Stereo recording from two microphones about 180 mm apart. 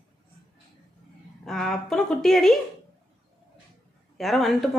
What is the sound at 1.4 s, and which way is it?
A woman's voice, centre (ahead or behind).